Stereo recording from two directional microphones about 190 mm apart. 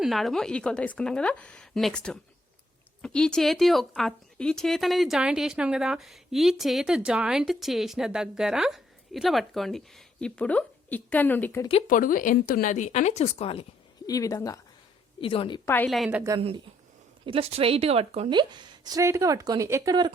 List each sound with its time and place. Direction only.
0.0 s speech: centre (ahead or behind)
11.9 s speech: 45° left (ahead or behind)
14.1 s speech: 20° left (ahead or behind)
15.2 s a woman's voice: 30° left (ahead or behind)
15.7 s speech: 5° left (ahead or behind)
17.2 s a woman's voice: 30° right (ahead or behind)